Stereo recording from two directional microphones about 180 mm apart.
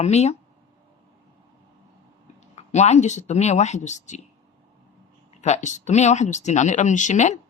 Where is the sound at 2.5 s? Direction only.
40° left (ahead or behind).